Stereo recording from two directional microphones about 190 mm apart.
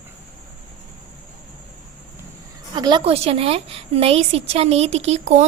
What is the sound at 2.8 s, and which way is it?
A woman's voice, 25° right (ahead or behind).